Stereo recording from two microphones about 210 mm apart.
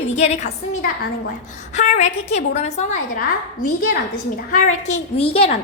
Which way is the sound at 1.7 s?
35° left (ahead or behind).